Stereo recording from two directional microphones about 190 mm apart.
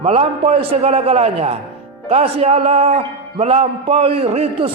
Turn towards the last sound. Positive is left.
turn(degrees=-30)  # may be behind; listen again after turning